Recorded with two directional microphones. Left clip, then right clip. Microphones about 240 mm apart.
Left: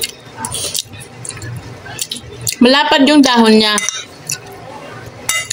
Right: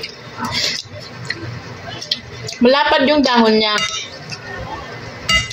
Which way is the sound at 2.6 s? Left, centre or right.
Left.